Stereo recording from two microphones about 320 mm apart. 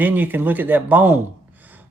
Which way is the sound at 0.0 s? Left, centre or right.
Centre.